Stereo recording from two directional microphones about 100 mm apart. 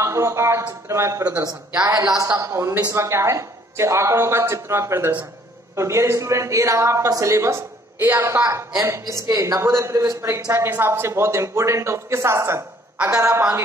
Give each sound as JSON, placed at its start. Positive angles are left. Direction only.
{"t": 0.0, "sound": "a woman's voice", "side_deg": -30}